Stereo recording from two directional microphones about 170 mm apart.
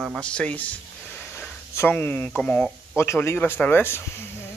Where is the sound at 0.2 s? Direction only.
5° left (ahead or behind).